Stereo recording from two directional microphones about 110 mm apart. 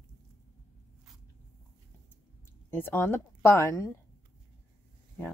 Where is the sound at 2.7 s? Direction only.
20° left (ahead or behind).